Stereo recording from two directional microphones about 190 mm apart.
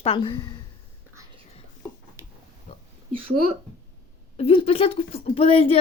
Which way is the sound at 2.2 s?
15° right (ahead or behind).